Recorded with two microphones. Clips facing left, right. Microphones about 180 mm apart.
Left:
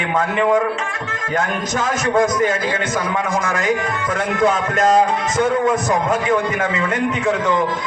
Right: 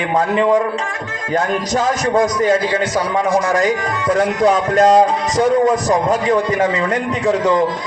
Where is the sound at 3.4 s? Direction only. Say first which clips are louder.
Right 3 dB; 35° right (ahead or behind).